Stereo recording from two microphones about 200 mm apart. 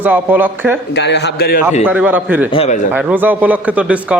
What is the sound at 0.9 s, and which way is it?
Speech, 60° left (ahead or behind).